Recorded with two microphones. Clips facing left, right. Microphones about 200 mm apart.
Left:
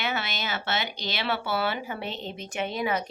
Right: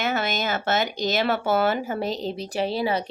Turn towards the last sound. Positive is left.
turn(degrees=-30)  # may be behind; listen again after turning